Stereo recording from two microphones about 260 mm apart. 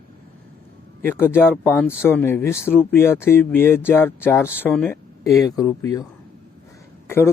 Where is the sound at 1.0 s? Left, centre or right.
Centre.